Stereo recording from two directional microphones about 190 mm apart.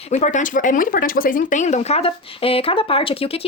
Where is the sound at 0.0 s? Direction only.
35° left (ahead or behind).